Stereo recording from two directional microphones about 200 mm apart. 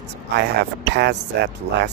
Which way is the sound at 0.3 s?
55° right (ahead or behind).